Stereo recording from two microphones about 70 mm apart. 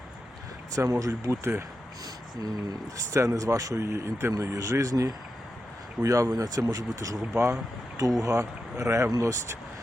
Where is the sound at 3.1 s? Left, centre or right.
Right.